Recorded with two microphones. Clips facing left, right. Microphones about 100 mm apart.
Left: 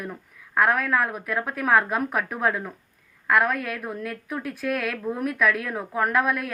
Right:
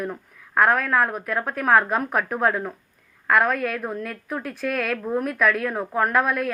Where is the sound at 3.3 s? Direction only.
5° left (ahead or behind).